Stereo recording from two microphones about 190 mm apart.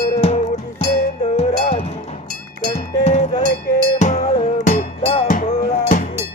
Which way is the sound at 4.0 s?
40° left (ahead or behind).